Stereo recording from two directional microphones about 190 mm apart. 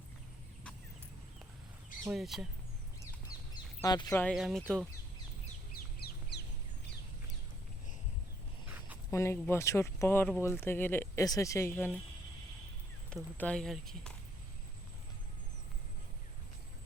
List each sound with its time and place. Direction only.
2.0 s speech: centre (ahead or behind)
3.5 s duck: 20° left (ahead or behind)
4.2 s speech: centre (ahead or behind)
5.7 s bird: 55° left (ahead or behind)
9.0 s speech: 15° left (ahead or behind)
13.1 s speech: 5° left (ahead or behind)